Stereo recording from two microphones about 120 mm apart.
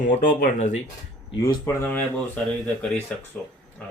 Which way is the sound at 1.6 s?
15° left (ahead or behind).